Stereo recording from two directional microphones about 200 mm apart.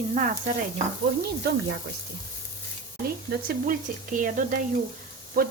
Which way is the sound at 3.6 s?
40° right (ahead or behind).